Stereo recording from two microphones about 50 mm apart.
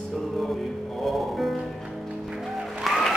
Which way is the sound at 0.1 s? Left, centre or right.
Centre.